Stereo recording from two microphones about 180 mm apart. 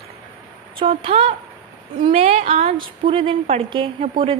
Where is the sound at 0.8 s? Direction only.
30° right (ahead or behind).